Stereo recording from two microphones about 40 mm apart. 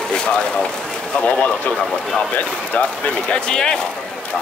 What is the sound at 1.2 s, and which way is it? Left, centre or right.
Speech, left.